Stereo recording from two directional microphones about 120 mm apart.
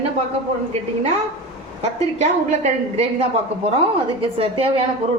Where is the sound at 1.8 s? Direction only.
70° right (ahead or behind).